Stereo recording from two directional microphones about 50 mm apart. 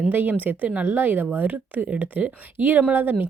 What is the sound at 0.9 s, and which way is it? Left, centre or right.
Speech, right.